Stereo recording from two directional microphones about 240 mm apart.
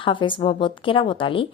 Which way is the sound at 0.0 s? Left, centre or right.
Left.